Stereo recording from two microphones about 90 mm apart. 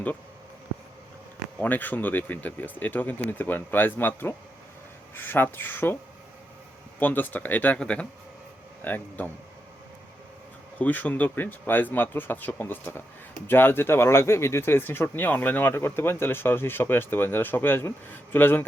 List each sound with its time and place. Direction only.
1.5 s speech: 20° left (ahead or behind)
7.0 s speech: 20° left (ahead or behind)
10.8 s speech: 20° left (ahead or behind)